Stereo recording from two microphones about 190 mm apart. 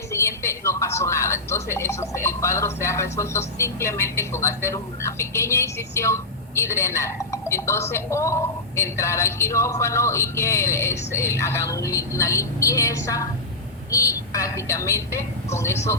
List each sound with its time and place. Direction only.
0.1 s a woman's voice: 15° left (ahead or behind)
13.9 s vehicle: 15° left (ahead or behind)
15.4 s a woman's voice: 15° left (ahead or behind)